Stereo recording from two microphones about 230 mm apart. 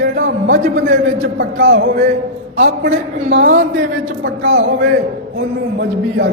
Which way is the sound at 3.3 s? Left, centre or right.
Right.